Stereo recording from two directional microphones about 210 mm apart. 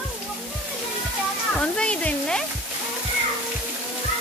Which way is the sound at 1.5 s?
5° left (ahead or behind).